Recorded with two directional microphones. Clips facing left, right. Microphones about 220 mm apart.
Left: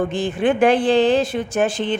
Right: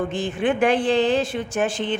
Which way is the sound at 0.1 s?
35° left (ahead or behind).